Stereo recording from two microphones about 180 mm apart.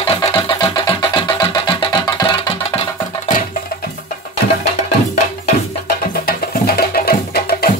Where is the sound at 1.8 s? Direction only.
25° left (ahead or behind).